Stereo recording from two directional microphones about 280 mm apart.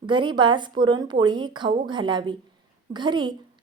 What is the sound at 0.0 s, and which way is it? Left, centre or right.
A woman's voice, centre.